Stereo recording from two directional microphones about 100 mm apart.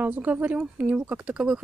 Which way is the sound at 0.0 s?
15° right (ahead or behind).